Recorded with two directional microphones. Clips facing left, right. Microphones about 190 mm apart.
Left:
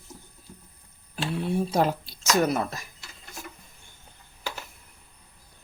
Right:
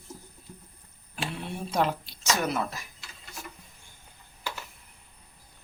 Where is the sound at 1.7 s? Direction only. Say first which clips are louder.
Left 3 dB; 40° left (ahead or behind).